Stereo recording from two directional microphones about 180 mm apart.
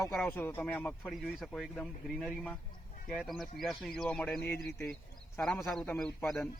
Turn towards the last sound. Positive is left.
turn(degrees=0)  # may be behind; listen again after turning